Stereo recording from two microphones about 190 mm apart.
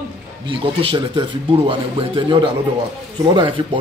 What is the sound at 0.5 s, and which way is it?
Speech, 25° right (ahead or behind).